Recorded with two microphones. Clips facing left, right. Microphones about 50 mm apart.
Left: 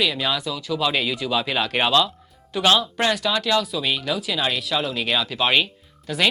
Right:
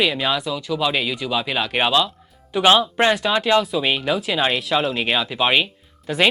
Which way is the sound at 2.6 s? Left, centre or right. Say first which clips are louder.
Right 4 dB; right.